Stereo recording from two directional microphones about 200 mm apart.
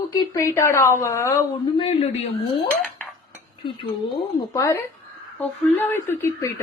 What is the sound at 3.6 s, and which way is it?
Speech, 20° left (ahead or behind).